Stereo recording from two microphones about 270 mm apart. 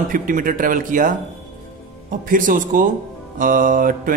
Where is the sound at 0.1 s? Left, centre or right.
Right.